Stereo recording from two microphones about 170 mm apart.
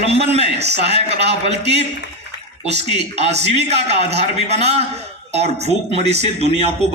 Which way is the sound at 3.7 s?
40° right (ahead or behind).